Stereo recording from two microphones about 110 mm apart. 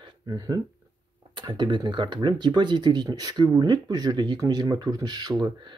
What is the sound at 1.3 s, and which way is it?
Speech, 45° right (ahead or behind).